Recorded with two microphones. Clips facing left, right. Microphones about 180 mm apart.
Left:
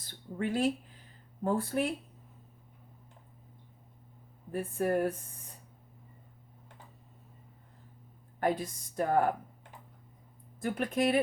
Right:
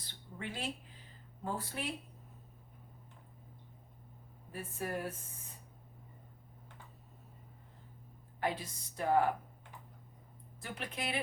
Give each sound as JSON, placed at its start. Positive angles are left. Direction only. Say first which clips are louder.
{"t": 0.0, "sound": "a sound", "louder": "left 10 dB", "side_deg": 45}
{"t": 1.5, "sound": "speech", "louder": "left 10 dB", "side_deg": 50}
{"t": 4.5, "sound": "speech", "louder": "left 10 dB", "side_deg": 50}
{"t": 8.4, "sound": "speech", "louder": "left 6 dB", "side_deg": 50}
{"t": 10.6, "sound": "speech", "louder": "left 12 dB", "side_deg": 50}